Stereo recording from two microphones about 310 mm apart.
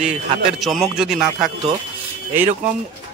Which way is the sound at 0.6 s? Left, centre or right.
Centre.